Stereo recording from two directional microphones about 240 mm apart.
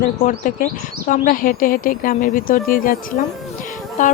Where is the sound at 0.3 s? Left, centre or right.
Left.